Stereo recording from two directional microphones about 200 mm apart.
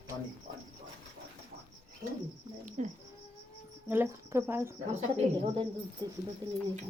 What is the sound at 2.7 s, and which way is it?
Speech, 35° right (ahead or behind).